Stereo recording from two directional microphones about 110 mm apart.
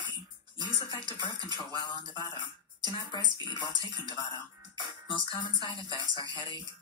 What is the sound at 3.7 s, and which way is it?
Music, 40° right (ahead or behind).